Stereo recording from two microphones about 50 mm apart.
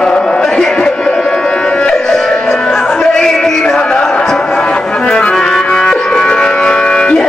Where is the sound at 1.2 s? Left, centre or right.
Centre.